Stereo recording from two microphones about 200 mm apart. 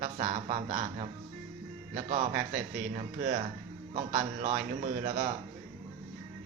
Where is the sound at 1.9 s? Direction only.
45° right (ahead or behind).